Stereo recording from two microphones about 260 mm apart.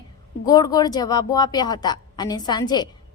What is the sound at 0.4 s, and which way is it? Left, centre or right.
A woman's voice, centre.